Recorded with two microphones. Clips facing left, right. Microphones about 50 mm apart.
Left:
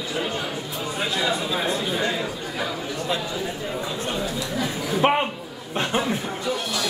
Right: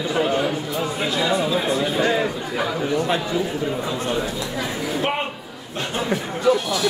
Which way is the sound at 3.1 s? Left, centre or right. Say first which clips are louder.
Right 5 dB; right.